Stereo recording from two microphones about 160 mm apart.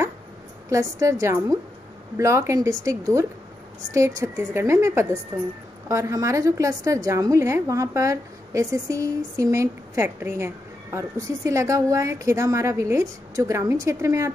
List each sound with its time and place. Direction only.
0.7 s a woman's voice: 20° right (ahead or behind)